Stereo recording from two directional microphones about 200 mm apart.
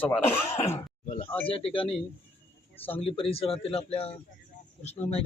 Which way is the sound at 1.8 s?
Centre (ahead or behind).